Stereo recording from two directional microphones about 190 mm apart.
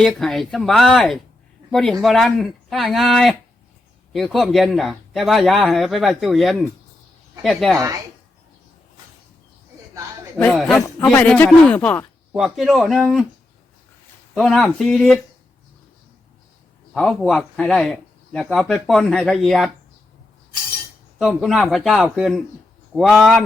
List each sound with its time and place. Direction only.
0.0 s speech: centre (ahead or behind)
10.3 s speech: centre (ahead or behind)
10.8 s speech: 10° left (ahead or behind)
14.3 s speech: centre (ahead or behind)
16.9 s speech: centre (ahead or behind)
21.2 s speech: centre (ahead or behind)